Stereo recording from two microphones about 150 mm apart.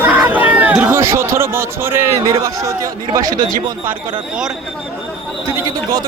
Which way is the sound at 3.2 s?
25° right (ahead or behind).